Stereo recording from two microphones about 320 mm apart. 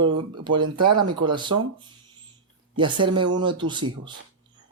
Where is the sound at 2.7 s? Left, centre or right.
Centre.